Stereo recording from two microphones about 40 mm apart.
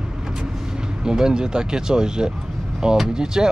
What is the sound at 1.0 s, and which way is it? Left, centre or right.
Speech, centre.